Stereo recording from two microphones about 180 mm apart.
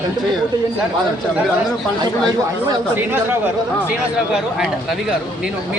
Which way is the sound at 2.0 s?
20° right (ahead or behind).